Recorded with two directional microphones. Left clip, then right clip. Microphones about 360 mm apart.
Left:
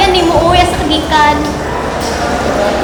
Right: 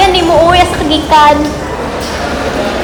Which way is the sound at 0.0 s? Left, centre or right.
Centre.